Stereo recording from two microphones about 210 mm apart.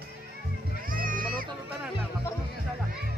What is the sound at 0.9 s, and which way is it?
Music, 40° right (ahead or behind).